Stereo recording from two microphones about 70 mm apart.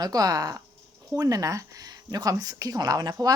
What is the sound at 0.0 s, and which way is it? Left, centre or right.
Speech, right.